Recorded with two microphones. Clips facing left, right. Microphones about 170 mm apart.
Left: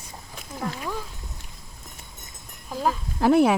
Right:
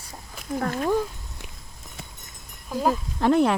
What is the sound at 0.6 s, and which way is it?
Speech, 50° right (ahead or behind).